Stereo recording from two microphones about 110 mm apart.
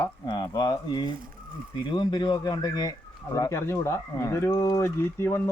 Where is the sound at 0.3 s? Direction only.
40° left (ahead or behind).